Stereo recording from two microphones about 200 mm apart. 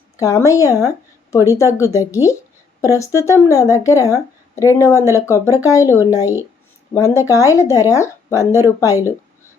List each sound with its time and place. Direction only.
0.2 s a woman's voice: 15° left (ahead or behind)